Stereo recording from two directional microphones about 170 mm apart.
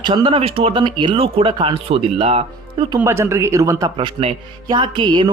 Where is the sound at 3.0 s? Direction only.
15° right (ahead or behind).